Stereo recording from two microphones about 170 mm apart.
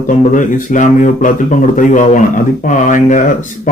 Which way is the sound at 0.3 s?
50° left (ahead or behind).